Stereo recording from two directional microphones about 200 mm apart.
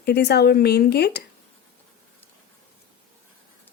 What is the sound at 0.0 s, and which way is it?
Speech, 55° left (ahead or behind).